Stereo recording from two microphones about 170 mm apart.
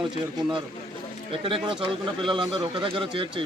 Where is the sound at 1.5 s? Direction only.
30° right (ahead or behind).